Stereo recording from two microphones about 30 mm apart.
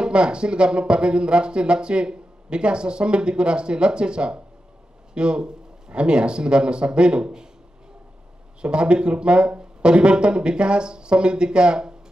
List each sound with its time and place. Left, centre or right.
0.0 s speech: right
8.5 s speech: right